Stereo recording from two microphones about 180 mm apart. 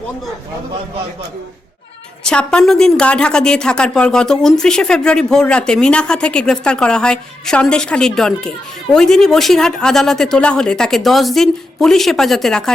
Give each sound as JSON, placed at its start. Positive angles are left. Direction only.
{"t": 2.2, "sound": "a woman's voice", "side_deg": 5}